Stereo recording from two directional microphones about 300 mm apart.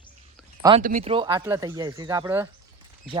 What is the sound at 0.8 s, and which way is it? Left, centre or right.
Speech, right.